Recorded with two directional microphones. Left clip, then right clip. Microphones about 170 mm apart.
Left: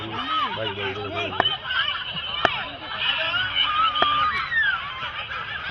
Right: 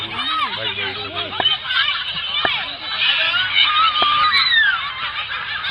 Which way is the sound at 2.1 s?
50° left (ahead or behind).